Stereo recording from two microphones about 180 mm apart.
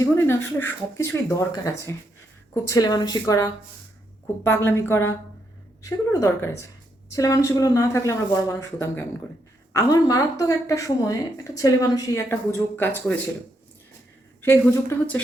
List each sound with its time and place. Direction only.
0.0 s speech: 15° left (ahead or behind)
14.4 s speech: 10° left (ahead or behind)